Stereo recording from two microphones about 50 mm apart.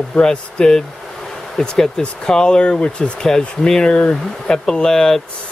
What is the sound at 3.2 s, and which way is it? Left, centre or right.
Speech, centre.